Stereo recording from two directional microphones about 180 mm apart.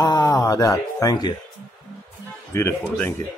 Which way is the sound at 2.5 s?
15° left (ahead or behind).